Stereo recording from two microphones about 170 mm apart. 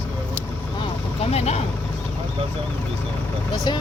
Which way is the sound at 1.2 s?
40° left (ahead or behind).